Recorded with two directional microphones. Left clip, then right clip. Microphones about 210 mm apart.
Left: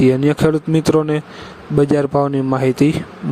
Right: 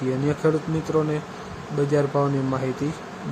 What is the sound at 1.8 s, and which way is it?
Speech, 45° left (ahead or behind).